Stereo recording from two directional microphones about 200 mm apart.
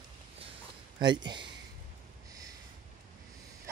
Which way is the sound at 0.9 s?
20° right (ahead or behind).